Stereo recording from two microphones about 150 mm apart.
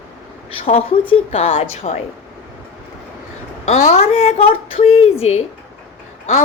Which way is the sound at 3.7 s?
45° left (ahead or behind).